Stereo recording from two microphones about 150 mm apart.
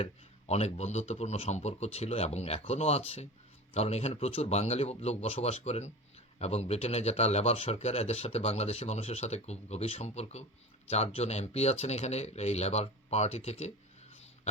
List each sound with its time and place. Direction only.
0.0 s speech: 45° left (ahead or behind)